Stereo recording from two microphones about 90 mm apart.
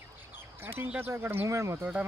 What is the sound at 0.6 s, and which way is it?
Speech, 25° right (ahead or behind).